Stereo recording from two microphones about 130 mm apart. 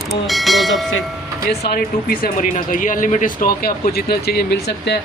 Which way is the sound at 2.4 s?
90° left.